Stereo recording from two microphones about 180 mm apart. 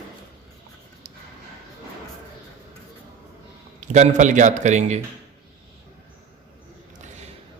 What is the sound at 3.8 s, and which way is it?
A man's voice, 40° right (ahead or behind).